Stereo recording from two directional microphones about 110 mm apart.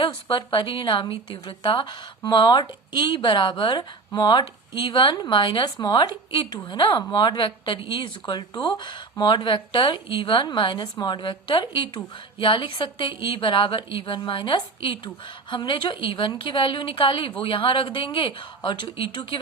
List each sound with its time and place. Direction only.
0.0 s a woman's voice: 50° left (ahead or behind)
5.7 s a woman's voice: 40° left (ahead or behind)